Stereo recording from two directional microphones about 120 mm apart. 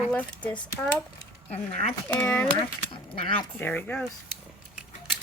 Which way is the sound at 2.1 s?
15° left (ahead or behind).